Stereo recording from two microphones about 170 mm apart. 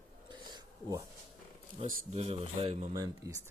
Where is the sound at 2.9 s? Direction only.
20° right (ahead or behind).